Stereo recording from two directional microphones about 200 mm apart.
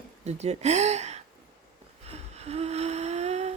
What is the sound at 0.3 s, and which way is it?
Speech, 35° right (ahead or behind).